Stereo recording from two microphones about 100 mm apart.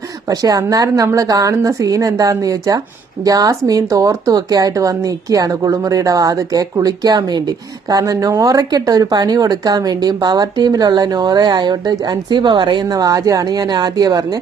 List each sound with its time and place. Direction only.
0.3 s speech: 35° right (ahead or behind)
12.8 s speech: 35° right (ahead or behind)